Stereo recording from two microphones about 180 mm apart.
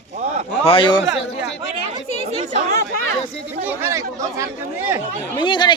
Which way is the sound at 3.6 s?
15° right (ahead or behind).